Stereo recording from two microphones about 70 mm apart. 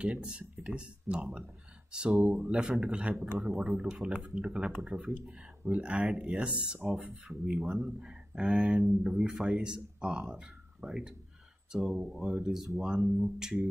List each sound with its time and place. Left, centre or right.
0.0 s speech: centre
3.2 s speech: centre
5.7 s speech: centre